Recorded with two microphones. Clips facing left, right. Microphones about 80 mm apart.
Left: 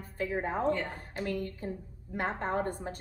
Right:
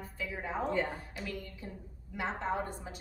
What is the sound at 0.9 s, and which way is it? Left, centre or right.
A woman's voice, left.